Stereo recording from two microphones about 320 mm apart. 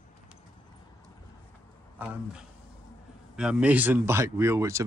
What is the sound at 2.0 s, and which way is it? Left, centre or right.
Speech, centre.